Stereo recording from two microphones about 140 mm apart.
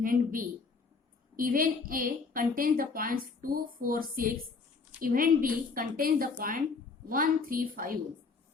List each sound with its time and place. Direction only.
0.0 s speech: 80° right
1.4 s a woman's voice: 90° right